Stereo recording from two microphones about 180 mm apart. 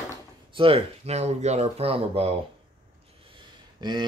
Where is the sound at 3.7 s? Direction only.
25° right (ahead or behind).